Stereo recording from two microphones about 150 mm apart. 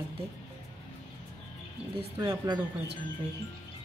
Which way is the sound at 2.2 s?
20° right (ahead or behind).